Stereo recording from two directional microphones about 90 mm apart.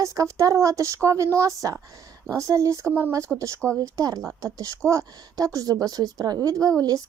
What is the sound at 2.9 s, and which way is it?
Speech, 25° right (ahead or behind).